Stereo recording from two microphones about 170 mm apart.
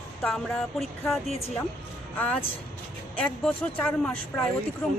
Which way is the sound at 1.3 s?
35° left (ahead or behind).